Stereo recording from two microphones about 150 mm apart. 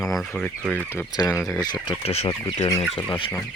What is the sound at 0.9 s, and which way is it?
Speech, 20° left (ahead or behind).